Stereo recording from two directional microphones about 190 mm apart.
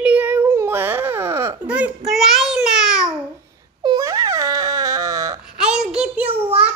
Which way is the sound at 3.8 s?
20° right (ahead or behind).